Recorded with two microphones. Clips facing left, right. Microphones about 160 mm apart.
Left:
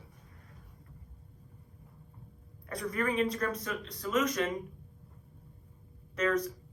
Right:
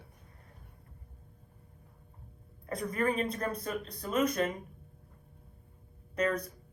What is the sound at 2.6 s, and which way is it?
Speech, 35° right (ahead or behind).